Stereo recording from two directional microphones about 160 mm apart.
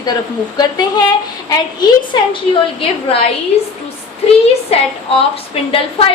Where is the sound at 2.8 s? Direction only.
35° left (ahead or behind).